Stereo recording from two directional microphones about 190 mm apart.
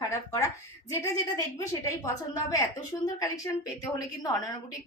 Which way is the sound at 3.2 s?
20° left (ahead or behind).